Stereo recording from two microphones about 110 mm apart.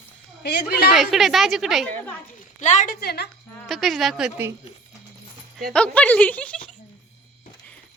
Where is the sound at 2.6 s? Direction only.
90° left.